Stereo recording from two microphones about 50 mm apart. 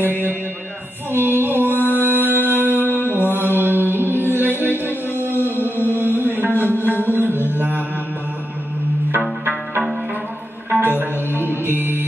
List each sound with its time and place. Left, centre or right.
0.0 s mantra: right
1.1 s music: right
7.5 s mantra: right
10.8 s music: right